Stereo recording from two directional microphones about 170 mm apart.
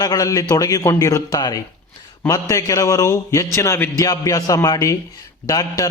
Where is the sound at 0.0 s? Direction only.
20° left (ahead or behind).